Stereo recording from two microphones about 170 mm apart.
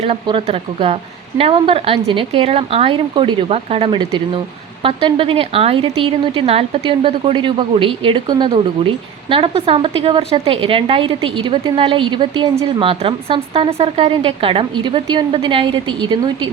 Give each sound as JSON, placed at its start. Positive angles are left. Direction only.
{"t": 0.0, "sound": "a woman's voice", "side_deg": -35}